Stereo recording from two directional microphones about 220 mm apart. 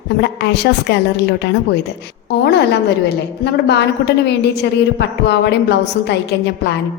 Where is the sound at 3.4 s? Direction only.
50° left (ahead or behind).